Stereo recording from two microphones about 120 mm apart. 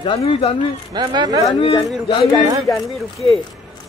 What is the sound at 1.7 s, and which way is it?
Speech, centre (ahead or behind).